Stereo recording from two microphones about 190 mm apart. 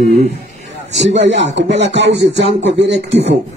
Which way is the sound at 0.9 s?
70° right (ahead or behind).